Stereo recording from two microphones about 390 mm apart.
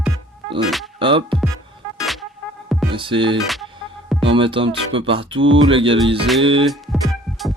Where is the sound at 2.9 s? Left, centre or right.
Centre.